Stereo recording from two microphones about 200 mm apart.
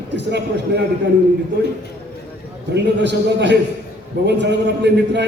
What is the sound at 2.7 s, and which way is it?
A man's voice, 60° right (ahead or behind).